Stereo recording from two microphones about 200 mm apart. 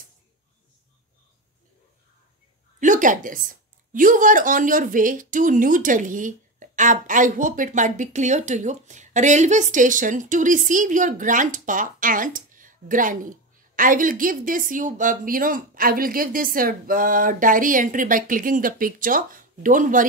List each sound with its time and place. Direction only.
2.8 s a woman's voice: 40° right (ahead or behind)